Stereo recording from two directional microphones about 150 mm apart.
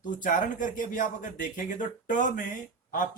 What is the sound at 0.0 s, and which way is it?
Speech, 60° left (ahead or behind).